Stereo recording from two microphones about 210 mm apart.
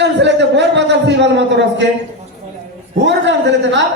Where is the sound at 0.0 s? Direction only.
55° right (ahead or behind).